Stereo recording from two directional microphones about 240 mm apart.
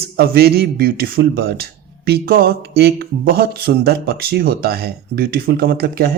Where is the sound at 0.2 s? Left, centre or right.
Right.